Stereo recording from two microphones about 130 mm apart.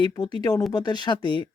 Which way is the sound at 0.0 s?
35° left (ahead or behind).